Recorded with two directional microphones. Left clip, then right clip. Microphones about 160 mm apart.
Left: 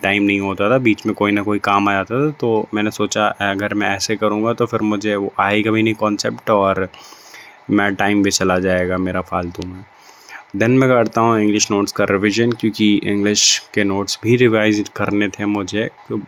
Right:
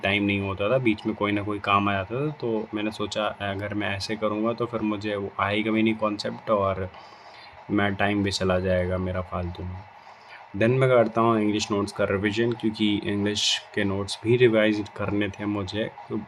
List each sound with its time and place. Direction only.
0.0 s speech: 35° left (ahead or behind)
10.6 s speech: 35° left (ahead or behind)